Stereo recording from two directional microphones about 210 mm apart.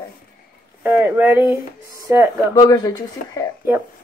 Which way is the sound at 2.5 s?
20° left (ahead or behind).